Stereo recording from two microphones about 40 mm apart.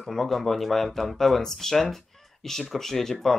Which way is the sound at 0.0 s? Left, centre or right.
Centre.